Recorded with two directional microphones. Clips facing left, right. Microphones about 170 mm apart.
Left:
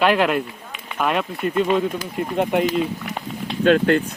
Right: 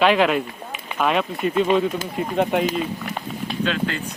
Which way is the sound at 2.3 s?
10° left (ahead or behind).